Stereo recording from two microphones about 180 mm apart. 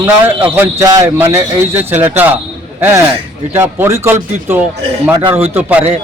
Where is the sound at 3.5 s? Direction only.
15° right (ahead or behind).